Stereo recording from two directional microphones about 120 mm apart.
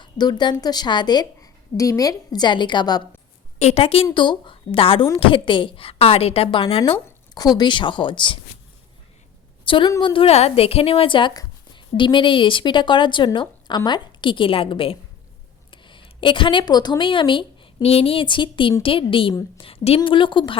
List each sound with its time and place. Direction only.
0.0 s a woman's voice: 35° left (ahead or behind)
3.6 s a woman's voice: 60° left (ahead or behind)
7.3 s a woman's voice: 35° left (ahead or behind)
9.6 s a woman's voice: 45° left (ahead or behind)